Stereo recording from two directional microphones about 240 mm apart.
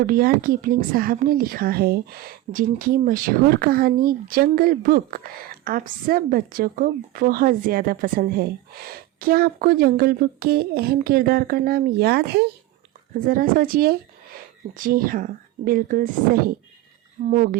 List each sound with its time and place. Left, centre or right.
0.0 s a woman's voice: right